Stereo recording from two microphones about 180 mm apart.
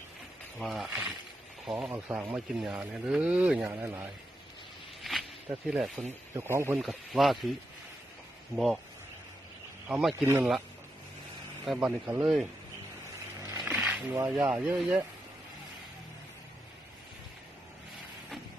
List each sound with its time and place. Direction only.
0.6 s a man's voice: centre (ahead or behind)
5.5 s a man's voice: 5° right (ahead or behind)
6.3 s speech: 15° right (ahead or behind)
6.7 s speech: centre (ahead or behind)
8.5 s a man's voice: centre (ahead or behind)
9.9 s a man's voice: centre (ahead or behind)
10.2 s speech: 10° right (ahead or behind)
11.6 s a man's voice: centre (ahead or behind)
13.6 s a sound: 5° right (ahead or behind)
14.1 s speech: 15° right (ahead or behind)
14.8 s speech: 5° right (ahead or behind)